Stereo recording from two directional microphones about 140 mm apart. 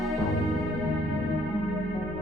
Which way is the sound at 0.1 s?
Centre (ahead or behind).